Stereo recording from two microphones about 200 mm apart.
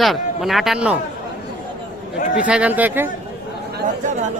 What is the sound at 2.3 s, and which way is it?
Speech, 5° right (ahead or behind).